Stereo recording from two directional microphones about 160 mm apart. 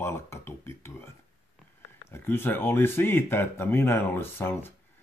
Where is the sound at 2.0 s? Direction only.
15° left (ahead or behind).